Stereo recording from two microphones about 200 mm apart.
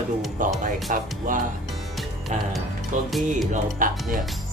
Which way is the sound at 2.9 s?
40° right (ahead or behind).